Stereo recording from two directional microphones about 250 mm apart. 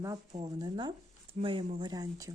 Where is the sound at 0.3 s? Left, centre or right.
Centre.